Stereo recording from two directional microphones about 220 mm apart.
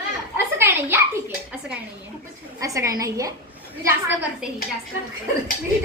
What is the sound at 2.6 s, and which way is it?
A woman's voice, 15° right (ahead or behind).